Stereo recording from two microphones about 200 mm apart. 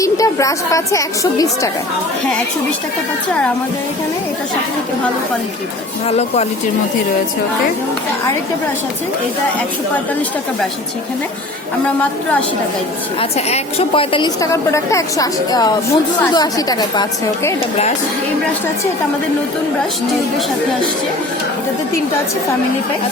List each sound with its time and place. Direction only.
0.0 s a woman's voice: 15° left (ahead or behind)
6.1 s speech: 30° left (ahead or behind)
13.3 s a woman's voice: 30° left (ahead or behind)